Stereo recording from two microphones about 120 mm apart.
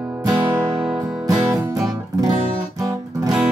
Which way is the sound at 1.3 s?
30° right (ahead or behind).